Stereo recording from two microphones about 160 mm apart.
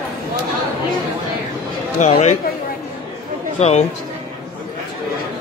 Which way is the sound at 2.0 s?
40° left (ahead or behind).